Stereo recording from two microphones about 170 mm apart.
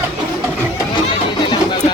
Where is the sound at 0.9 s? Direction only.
30° left (ahead or behind).